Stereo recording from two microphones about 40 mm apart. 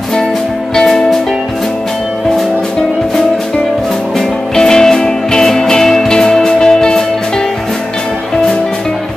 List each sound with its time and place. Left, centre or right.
0.7 s music: centre
4.6 s music: centre